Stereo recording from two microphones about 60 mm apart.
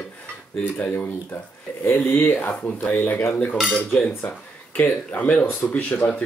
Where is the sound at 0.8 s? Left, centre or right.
Left.